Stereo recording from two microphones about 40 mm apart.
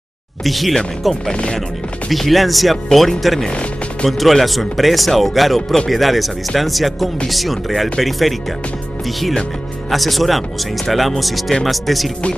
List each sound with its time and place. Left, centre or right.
0.4 s speech: centre
1.3 s speech: left
2.0 s speech: centre
9.8 s speech: centre